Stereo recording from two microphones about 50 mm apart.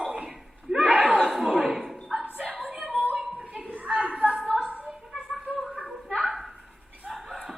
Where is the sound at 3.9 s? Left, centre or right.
Right.